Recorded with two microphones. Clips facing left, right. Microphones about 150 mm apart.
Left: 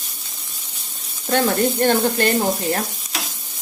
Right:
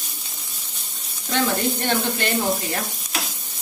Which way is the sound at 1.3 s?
50° left (ahead or behind).